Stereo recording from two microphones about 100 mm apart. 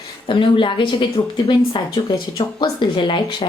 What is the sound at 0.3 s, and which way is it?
Speech, 55° left (ahead or behind).